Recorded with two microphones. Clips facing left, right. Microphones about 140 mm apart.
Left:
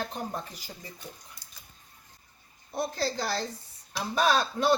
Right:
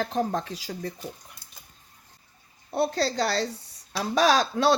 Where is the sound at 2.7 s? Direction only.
70° right (ahead or behind).